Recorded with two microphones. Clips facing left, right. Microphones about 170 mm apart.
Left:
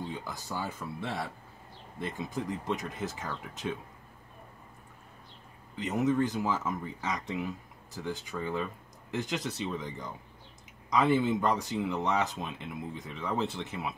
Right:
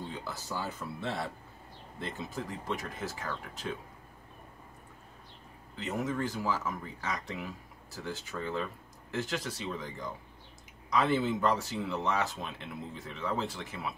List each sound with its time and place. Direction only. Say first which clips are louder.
0.2 s speech: left 1 dB; 15° left (ahead or behind)
5.8 s speech: left 5 dB; 15° left (ahead or behind)